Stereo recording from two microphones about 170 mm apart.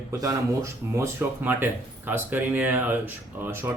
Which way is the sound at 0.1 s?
20° right (ahead or behind).